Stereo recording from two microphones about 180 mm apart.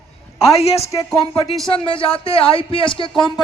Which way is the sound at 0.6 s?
35° left (ahead or behind).